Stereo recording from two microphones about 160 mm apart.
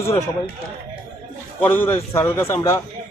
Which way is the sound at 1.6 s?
10° left (ahead or behind).